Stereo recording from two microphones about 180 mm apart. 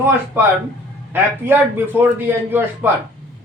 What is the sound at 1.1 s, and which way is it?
A man's voice, 10° right (ahead or behind).